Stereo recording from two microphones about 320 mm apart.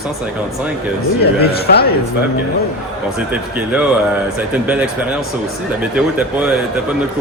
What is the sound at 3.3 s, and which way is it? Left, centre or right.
Speech, centre.